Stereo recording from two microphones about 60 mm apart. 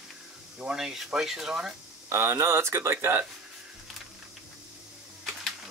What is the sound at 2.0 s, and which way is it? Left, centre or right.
Speech, right.